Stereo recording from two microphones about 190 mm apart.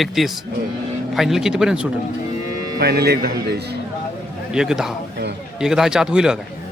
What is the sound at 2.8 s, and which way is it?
Speech, 60° right (ahead or behind).